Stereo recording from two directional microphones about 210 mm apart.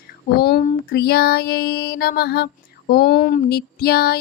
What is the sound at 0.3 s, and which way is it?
Speech, 45° left (ahead or behind).